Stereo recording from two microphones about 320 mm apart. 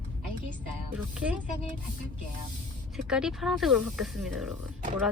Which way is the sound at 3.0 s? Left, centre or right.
Centre.